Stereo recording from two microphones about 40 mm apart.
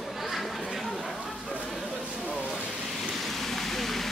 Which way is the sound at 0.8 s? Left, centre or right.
Centre.